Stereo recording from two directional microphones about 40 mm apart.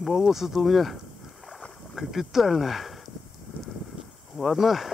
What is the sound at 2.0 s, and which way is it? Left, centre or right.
Speech, centre.